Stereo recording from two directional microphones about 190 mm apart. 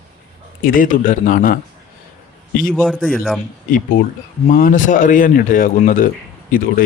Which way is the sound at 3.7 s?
45° left (ahead or behind).